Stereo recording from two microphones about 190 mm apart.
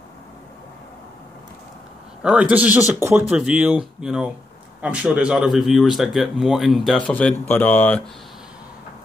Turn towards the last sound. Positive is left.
turn(degrees=10)  # may be behind; listen again after turning